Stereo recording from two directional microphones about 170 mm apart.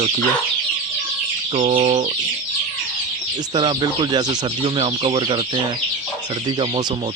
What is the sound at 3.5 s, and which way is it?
Speech, 25° right (ahead or behind).